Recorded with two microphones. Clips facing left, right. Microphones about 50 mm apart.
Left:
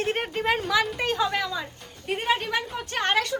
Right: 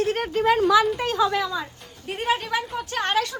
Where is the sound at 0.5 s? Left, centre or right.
Centre.